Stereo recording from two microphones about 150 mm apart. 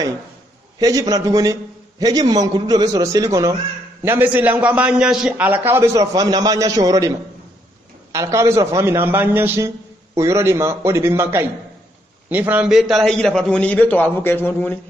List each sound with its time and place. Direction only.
0.7 s a man's voice: 25° right (ahead or behind); by 14.8 s 15° left (ahead or behind)